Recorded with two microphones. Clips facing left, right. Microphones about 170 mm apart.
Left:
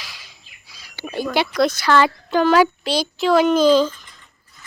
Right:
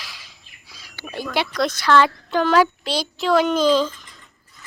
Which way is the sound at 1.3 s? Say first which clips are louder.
Left 4 dB; 5° left (ahead or behind).